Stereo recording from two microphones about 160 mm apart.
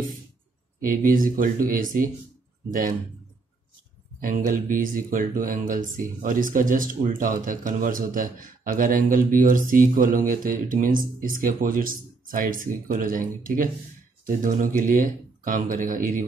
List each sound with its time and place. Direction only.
0.8 s speech: 60° right (ahead or behind)
4.2 s speech: 60° right (ahead or behind)